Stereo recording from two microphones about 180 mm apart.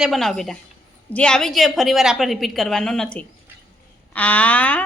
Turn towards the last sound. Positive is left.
turn(degrees=10)  # may be behind; listen again after turning